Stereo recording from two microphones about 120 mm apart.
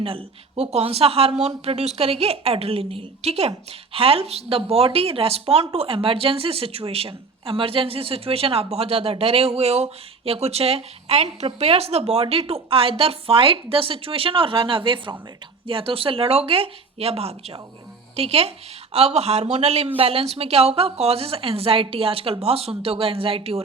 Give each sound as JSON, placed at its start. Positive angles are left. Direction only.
{"t": 0.0, "sound": "a woman's voice", "side_deg": -50}